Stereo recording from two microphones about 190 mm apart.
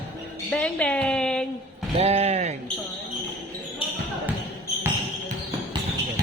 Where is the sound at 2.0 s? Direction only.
35° right (ahead or behind).